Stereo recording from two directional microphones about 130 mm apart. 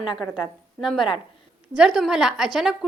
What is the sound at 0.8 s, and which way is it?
A woman's voice, centre (ahead or behind).